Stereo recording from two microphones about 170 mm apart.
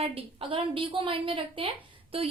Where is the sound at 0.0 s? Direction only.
35° right (ahead or behind).